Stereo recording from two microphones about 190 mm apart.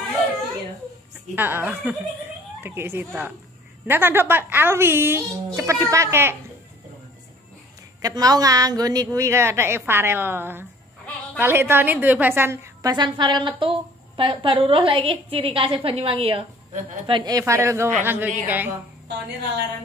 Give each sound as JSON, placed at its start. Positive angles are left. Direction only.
{"t": 1.3, "sound": "a woman's voice", "side_deg": -10}
{"t": 8.0, "sound": "a woman's voice", "side_deg": -20}
{"t": 19.0, "sound": "a woman's voice", "side_deg": -60}